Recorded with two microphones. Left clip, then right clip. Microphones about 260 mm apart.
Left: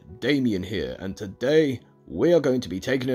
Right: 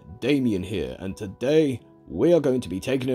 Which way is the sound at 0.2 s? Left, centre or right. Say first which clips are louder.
Even; centre.